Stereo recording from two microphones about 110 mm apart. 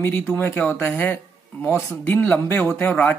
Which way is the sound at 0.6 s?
20° left (ahead or behind).